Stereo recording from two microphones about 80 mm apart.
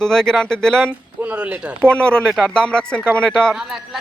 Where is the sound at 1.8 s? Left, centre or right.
Centre.